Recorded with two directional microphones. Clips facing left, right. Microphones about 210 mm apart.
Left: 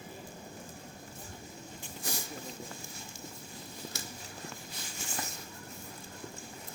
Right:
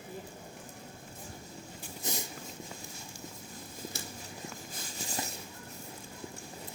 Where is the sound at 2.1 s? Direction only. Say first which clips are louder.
Right 2 dB; 20° right (ahead or behind).